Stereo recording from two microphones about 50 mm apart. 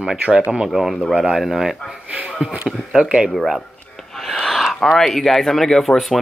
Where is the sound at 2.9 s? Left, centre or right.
Centre.